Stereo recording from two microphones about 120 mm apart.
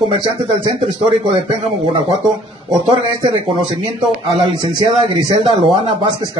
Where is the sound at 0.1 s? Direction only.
45° right (ahead or behind).